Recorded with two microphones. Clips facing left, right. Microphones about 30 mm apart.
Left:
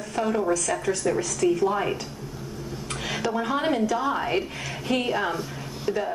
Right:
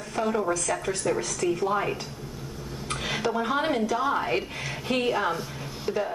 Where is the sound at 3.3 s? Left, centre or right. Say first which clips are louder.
Left 1 dB; centre.